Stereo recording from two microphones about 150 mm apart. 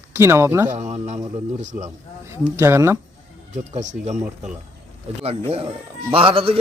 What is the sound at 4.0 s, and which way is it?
A man's voice, 50° right (ahead or behind).